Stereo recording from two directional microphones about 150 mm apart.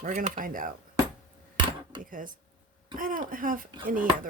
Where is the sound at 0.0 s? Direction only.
55° right (ahead or behind).